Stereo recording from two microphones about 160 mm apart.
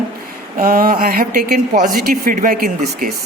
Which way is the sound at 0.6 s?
70° right (ahead or behind).